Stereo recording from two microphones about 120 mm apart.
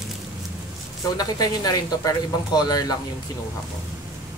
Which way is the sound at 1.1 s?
30° left (ahead or behind).